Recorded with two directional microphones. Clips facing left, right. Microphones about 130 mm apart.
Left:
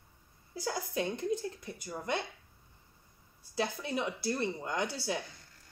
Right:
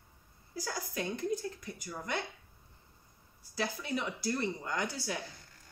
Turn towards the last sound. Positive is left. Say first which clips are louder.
# left 2 dB
turn(degrees=25)  # may be behind; listen again after turning